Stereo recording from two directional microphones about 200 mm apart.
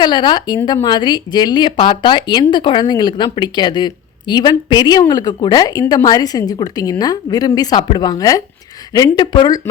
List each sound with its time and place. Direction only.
0.0 s a woman's voice: 20° left (ahead or behind)